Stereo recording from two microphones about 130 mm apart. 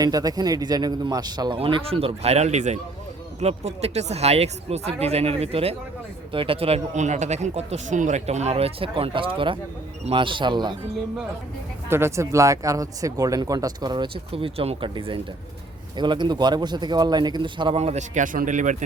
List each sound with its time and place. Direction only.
0.0 s a man's voice: 30° right (ahead or behind)
1.5 s a man's voice: 45° right (ahead or behind)
11.9 s a man's voice: 20° right (ahead or behind); by 17.7 s 40° right (ahead or behind)
17.7 s a man's voice: 60° right (ahead or behind); by 18.8 s 75° right (ahead or behind)